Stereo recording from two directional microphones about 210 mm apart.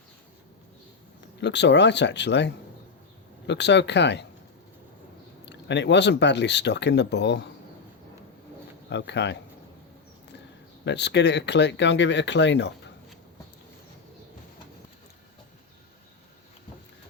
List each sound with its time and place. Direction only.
1.4 s speech: 55° left (ahead or behind)
5.5 s speech: 55° left (ahead or behind)
8.9 s speech: 55° left (ahead or behind)
10.8 s speech: 55° left (ahead or behind)